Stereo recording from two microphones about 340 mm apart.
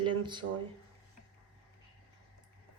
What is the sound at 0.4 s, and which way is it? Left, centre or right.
Speech, right.